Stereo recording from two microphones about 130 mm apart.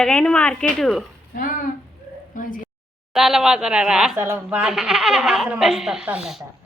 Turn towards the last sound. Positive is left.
turn(degrees=-5)  # may be behind; listen again after turning